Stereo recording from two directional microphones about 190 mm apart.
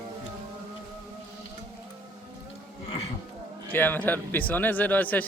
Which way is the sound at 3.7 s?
10° left (ahead or behind).